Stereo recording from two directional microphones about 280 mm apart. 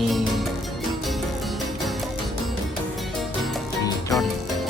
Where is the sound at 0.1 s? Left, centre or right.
Centre.